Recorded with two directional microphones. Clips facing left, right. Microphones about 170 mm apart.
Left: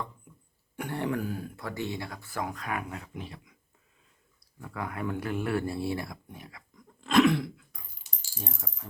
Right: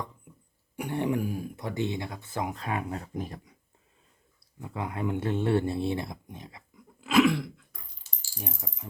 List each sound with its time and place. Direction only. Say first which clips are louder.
0.8 s speech: right 3 dB; 15° right (ahead or behind)
3.0 s speech: right 5 dB; 40° right (ahead or behind)
4.6 s speech: right 2 dB; 20° right (ahead or behind)
6.7 s a sound: even; 5° right (ahead or behind)
8.1 s keys jangling: left 1 dB; 15° left (ahead or behind)
8.4 s speech: right 1 dB; 15° right (ahead or behind)